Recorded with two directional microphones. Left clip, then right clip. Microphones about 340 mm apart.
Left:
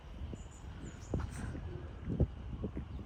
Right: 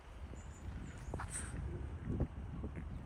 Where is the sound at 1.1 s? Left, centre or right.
Left.